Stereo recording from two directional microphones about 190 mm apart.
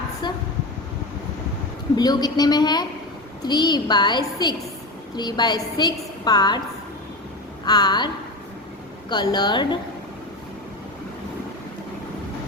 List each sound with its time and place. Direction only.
2.0 s a woman's voice: 20° left (ahead or behind)
7.6 s a woman's voice: 20° left (ahead or behind)